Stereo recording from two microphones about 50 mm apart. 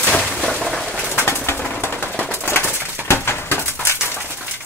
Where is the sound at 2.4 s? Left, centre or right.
Left.